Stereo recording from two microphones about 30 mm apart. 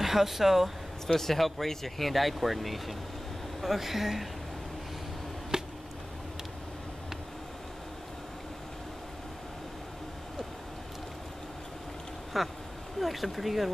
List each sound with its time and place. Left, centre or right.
0.0 s speech: centre
1.0 s speech: centre
5.5 s a sound: right
12.3 s speech: centre